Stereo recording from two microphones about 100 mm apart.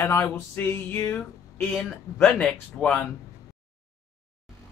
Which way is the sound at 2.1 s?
15° left (ahead or behind).